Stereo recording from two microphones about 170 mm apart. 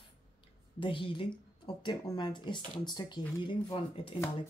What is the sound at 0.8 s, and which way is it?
Speech, 30° left (ahead or behind).